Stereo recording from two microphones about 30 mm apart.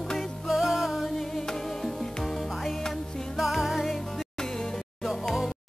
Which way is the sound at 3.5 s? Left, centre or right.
Centre.